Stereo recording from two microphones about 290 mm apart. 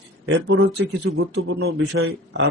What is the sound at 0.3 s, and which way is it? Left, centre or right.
Speech, right.